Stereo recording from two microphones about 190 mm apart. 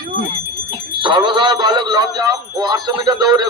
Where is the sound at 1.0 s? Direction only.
25° right (ahead or behind).